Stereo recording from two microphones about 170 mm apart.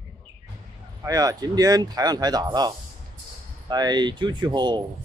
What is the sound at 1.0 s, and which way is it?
Speech, 20° right (ahead or behind).